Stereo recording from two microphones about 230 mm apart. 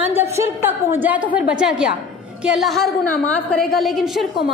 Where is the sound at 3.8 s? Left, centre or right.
Centre.